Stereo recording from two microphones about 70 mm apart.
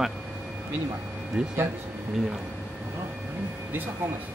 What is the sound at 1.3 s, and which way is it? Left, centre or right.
Speech, centre.